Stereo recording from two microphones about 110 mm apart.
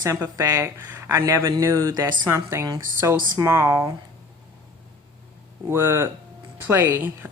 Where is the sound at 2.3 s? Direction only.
25° right (ahead or behind).